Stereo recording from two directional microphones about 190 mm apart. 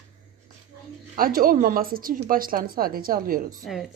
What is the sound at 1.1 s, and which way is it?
Speech, 50° right (ahead or behind).